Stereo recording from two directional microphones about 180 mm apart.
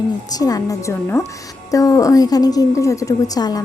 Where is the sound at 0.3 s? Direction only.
20° left (ahead or behind).